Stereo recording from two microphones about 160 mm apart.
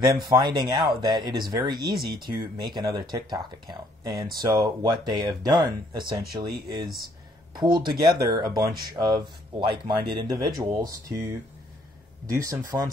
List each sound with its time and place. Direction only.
0.0 s speech: 20° right (ahead or behind)
7.5 s speech: 30° right (ahead or behind)